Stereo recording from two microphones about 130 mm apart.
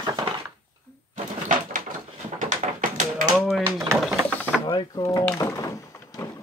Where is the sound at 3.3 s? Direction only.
Centre (ahead or behind).